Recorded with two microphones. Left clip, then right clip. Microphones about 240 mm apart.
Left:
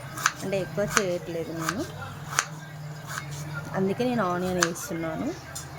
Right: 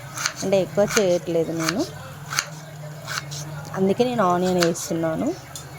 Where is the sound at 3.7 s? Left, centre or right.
Right.